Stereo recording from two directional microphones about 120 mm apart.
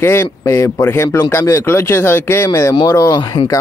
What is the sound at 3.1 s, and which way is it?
Speech, 40° left (ahead or behind).